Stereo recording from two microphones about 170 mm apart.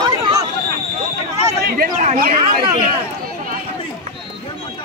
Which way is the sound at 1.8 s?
50° right (ahead or behind).